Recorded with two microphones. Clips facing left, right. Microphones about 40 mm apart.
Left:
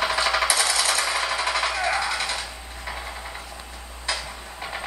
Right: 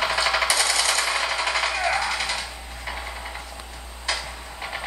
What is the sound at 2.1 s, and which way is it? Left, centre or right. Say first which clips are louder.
Typewriter: even; right.